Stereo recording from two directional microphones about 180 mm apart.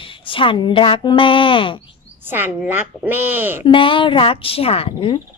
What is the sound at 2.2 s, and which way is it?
A child's voice, 10° right (ahead or behind).